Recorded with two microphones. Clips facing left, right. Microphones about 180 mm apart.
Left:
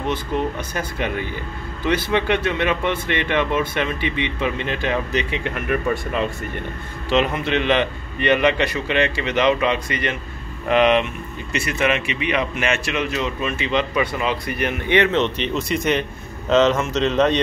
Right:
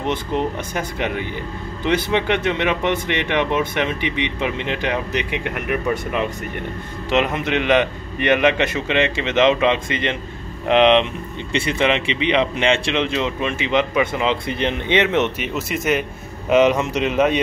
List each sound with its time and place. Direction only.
0.0 s a man's voice: 20° right (ahead or behind)